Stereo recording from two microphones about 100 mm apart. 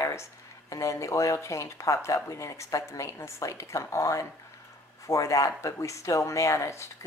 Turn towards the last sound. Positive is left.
turn(degrees=30)  # may be behind; listen again after turning